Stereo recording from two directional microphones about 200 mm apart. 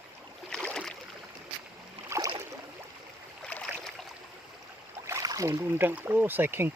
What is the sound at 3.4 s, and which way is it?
Boat, 5° left (ahead or behind).